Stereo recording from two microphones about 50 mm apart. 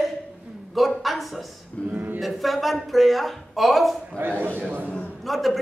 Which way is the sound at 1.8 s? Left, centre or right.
Left.